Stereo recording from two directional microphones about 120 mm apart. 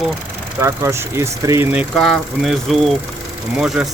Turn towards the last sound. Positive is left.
turn(degrees=-5)  # may be behind; listen again after turning